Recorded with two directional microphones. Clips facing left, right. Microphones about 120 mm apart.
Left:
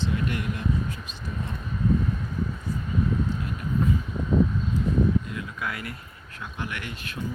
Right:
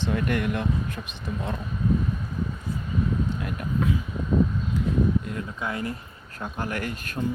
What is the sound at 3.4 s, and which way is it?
Vehicle, 60° right (ahead or behind).